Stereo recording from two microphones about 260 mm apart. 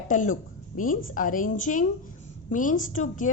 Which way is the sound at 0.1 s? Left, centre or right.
Left.